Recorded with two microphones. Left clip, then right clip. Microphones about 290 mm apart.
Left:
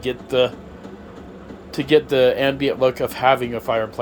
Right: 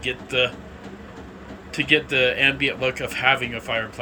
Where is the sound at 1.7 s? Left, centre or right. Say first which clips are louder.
Left 3 dB; centre.